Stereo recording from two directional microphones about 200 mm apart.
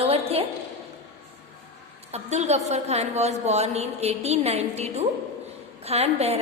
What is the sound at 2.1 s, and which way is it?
A woman's voice, 35° right (ahead or behind).